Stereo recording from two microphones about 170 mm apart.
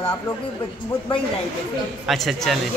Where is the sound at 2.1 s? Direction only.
Centre (ahead or behind).